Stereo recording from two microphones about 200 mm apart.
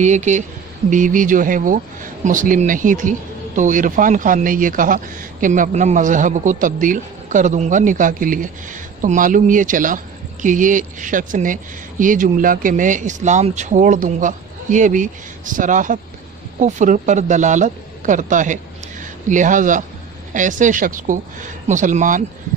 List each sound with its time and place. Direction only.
0.0 s a man's voice: 35° right (ahead or behind)